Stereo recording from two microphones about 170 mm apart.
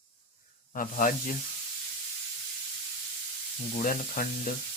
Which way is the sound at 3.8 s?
55° left (ahead or behind).